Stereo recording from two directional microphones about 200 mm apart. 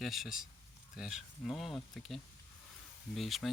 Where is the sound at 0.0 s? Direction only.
Centre (ahead or behind).